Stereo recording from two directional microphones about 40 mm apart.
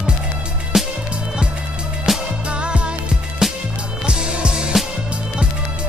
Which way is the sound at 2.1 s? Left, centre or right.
Centre.